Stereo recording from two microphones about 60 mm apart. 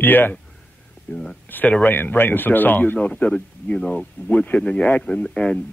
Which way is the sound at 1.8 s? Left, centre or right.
Left.